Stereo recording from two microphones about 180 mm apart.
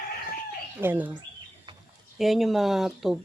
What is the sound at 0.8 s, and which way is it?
Speech, 10° right (ahead or behind).